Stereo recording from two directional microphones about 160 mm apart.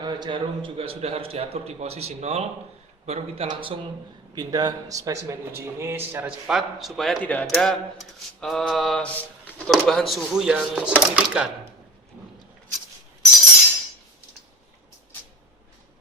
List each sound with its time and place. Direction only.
0.0 s a man's voice: 25° right (ahead or behind); by 11.4 s 10° right (ahead or behind)